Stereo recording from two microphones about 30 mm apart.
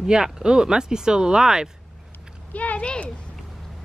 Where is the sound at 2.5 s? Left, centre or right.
Left.